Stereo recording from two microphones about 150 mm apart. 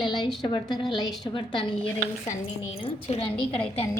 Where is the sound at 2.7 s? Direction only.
40° left (ahead or behind).